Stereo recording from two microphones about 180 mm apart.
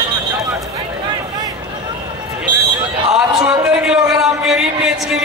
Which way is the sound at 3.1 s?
5° right (ahead or behind).